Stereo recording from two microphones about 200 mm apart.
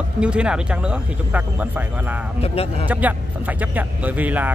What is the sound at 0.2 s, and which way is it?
Speech, 5° right (ahead or behind).